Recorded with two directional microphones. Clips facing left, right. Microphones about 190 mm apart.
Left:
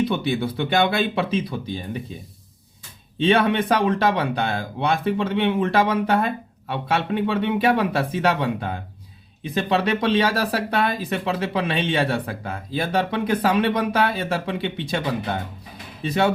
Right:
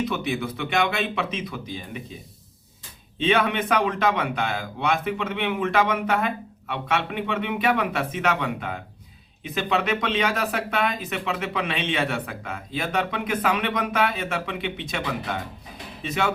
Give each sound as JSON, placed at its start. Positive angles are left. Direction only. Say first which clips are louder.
{"t": 0.0, "sound": "speech", "louder": "left 4 dB", "side_deg": 30}
{"t": 3.2, "sound": "speech", "louder": "left 4 dB", "side_deg": 30}